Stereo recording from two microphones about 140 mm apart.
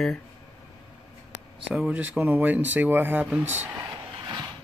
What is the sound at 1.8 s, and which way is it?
Speech, 10° right (ahead or behind).